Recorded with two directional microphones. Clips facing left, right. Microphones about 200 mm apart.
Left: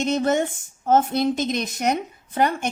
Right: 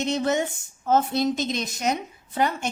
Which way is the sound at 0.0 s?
50° left (ahead or behind).